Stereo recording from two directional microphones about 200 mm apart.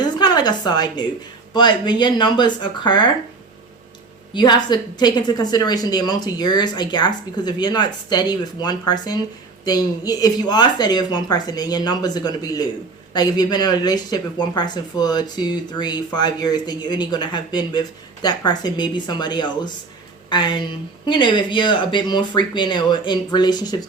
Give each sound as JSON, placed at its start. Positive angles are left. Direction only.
{"t": 0.0, "sound": "a sound", "side_deg": 20}
{"t": 1.5, "sound": "speech", "side_deg": 20}
{"t": 4.4, "sound": "speech", "side_deg": 20}